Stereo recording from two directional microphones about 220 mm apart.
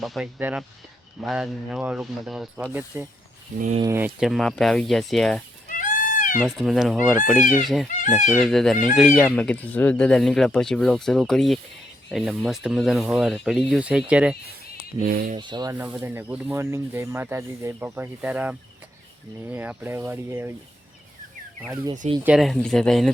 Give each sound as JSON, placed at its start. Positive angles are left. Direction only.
{"t": 0.0, "sound": "speech", "side_deg": 0}
{"t": 3.6, "sound": "speech", "side_deg": -30}
{"t": 3.8, "sound": "speech", "side_deg": -10}
{"t": 5.7, "sound": "a sound", "side_deg": 35}
{"t": 6.4, "sound": "speech", "side_deg": 0}
{"t": 15.0, "sound": "speech", "side_deg": -40}
{"t": 15.4, "sound": "speech", "side_deg": -20}
{"t": 15.7, "sound": "speech", "side_deg": -10}
{"t": 22.2, "sound": "speech", "side_deg": 0}